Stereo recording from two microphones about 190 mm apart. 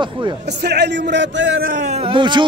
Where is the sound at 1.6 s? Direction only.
40° right (ahead or behind); by 2.5 s 25° right (ahead or behind).